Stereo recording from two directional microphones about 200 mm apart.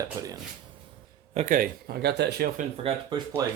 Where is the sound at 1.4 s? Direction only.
40° right (ahead or behind).